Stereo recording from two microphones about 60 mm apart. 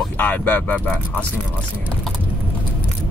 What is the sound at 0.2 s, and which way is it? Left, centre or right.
Speech, left.